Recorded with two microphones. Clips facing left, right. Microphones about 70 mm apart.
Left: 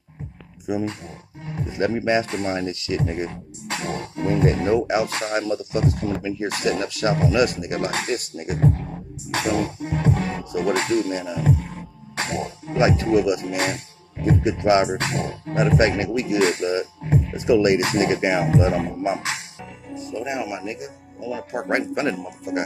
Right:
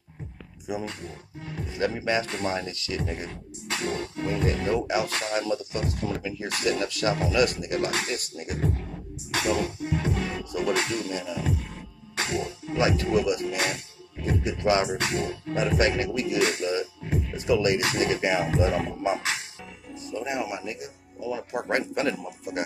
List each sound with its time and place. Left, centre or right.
0.8 s speech: left
3.0 s music: left
4.6 s speech: left
5.9 s speech: left
6.1 s speech: left
7.8 s speech: left
8.9 s music: left
13.6 s speech: left
17.0 s music: left
17.6 s speech: left
18.4 s speech: left
20.2 s speech: centre